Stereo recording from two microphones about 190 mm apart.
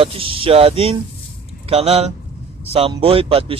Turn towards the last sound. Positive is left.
turn(degrees=-30)  # may be behind; listen again after turning